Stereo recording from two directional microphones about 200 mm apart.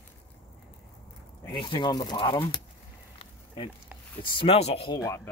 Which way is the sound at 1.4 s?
25° left (ahead or behind).